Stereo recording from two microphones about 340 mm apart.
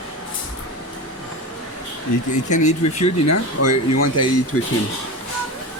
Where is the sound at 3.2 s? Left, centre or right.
Left.